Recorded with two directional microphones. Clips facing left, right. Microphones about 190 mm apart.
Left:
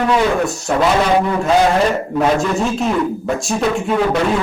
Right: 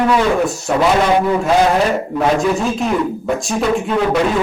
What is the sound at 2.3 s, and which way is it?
A man's voice, centre (ahead or behind).